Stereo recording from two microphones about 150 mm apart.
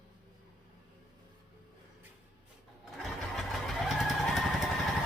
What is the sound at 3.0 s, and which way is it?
Vehicle, centre (ahead or behind).